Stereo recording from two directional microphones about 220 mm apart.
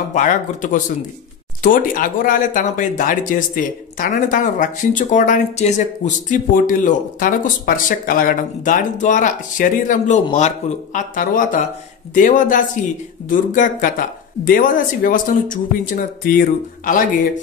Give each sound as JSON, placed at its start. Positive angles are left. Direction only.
{"t": 0.1, "sound": "speech", "side_deg": 35}